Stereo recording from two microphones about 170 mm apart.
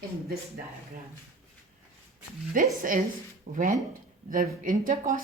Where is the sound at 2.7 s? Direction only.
55° right (ahead or behind).